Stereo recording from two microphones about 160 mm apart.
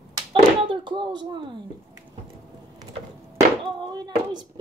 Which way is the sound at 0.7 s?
30° right (ahead or behind).